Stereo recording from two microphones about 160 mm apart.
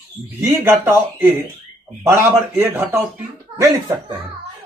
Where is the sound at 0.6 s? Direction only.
15° right (ahead or behind).